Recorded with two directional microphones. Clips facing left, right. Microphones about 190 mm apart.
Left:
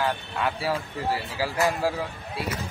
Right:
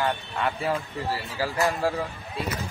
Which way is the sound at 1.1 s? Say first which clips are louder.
Left 1 dB; 15° left (ahead or behind).